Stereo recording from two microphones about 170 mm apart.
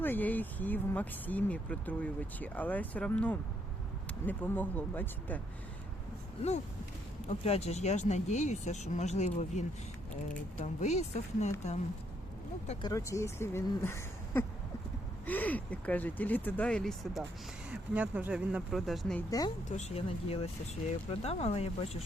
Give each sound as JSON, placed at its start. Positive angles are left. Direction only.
{"t": 0.0, "sound": "speech", "side_deg": 10}
{"t": 7.3, "sound": "speech", "side_deg": 40}
{"t": 12.8, "sound": "speech", "side_deg": 20}
{"t": 19.7, "sound": "speech", "side_deg": 40}